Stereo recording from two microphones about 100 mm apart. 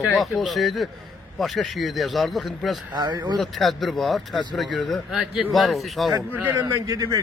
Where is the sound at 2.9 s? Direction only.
45° right (ahead or behind).